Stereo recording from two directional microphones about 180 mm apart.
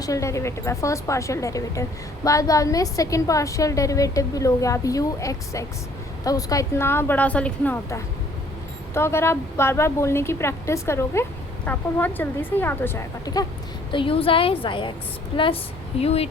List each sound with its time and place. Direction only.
0.0 s a woman's voice: 15° left (ahead or behind)
13.9 s a woman's voice: 30° left (ahead or behind)